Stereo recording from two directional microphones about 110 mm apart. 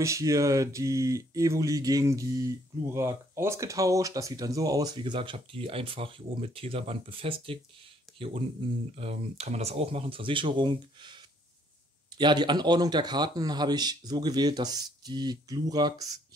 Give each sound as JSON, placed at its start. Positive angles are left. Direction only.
{"t": 0.0, "sound": "speech", "side_deg": -30}